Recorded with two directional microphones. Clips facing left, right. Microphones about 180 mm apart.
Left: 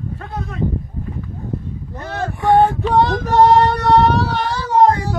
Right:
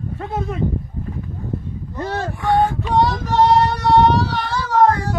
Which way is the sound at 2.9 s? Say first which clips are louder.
Left 2 dB; 50° left (ahead or behind).